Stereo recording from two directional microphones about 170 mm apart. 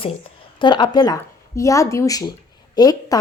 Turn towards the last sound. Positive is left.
turn(degrees=20)  # may be behind; listen again after turning